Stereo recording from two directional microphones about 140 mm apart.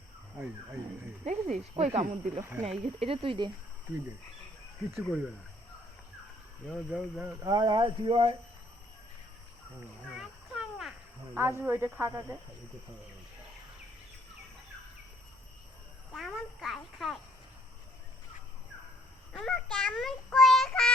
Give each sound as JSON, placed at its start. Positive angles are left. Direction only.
{"t": 1.2, "sound": "speech", "side_deg": -60}
{"t": 1.7, "sound": "speech", "side_deg": -45}
{"t": 6.7, "sound": "child singing", "side_deg": -5}
{"t": 7.4, "sound": "speech", "side_deg": -30}
{"t": 10.2, "sound": "a sound", "side_deg": -5}
{"t": 11.3, "sound": "speech", "side_deg": -15}
{"t": 16.1, "sound": "a child's voice", "side_deg": 0}
{"t": 19.3, "sound": "a child's voice", "side_deg": 5}
{"t": 19.7, "sound": "child singing", "side_deg": 0}